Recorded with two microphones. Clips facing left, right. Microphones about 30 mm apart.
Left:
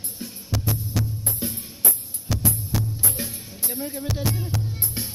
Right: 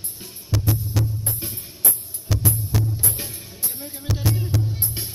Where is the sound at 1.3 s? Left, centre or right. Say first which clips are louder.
Left 2 dB; right.